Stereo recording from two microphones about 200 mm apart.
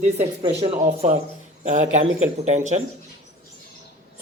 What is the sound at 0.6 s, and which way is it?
A woman's voice, 35° right (ahead or behind).